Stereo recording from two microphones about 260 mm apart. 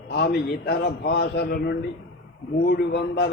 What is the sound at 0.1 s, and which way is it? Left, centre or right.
A man's voice, left.